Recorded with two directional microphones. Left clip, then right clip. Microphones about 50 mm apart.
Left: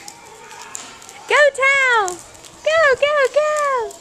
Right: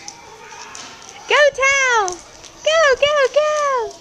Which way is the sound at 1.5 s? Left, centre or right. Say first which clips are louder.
Even; right.